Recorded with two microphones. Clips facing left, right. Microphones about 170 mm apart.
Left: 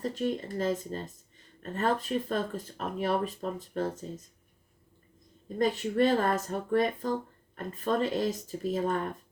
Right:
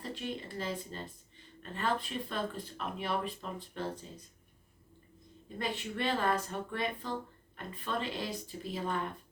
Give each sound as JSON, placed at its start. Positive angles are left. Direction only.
{"t": 0.0, "sound": "speech", "side_deg": 45}
{"t": 5.5, "sound": "speech", "side_deg": 40}